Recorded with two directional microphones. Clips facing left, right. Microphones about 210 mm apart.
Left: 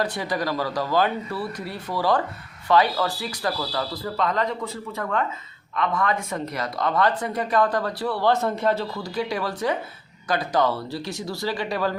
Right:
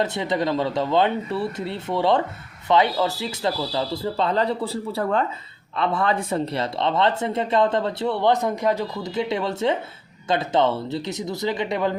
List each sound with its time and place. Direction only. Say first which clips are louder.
0.0 s speech: right 3 dB; 25° right (ahead or behind)